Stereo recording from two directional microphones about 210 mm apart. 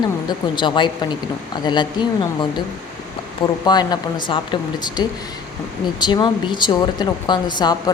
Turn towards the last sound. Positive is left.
turn(degrees=20)  # may be behind; listen again after turning